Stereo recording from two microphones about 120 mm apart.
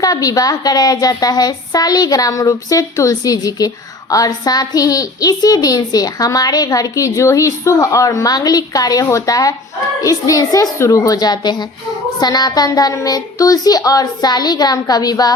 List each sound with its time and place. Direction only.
0.0 s a woman's voice: 30° left (ahead or behind)